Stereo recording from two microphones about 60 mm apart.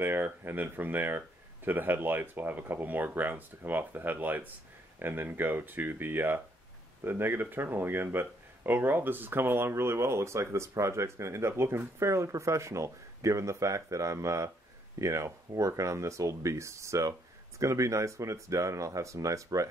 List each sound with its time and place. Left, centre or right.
0.0 s speech: right